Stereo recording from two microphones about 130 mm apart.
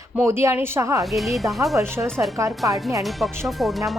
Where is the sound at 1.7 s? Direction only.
20° right (ahead or behind).